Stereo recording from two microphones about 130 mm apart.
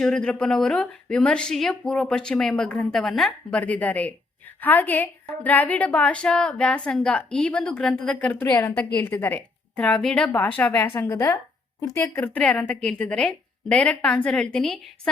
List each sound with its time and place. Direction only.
0.0 s a woman's voice: 5° left (ahead or behind)
8.4 s a woman's voice: 25° left (ahead or behind)
8.8 s a woman's voice: 15° left (ahead or behind)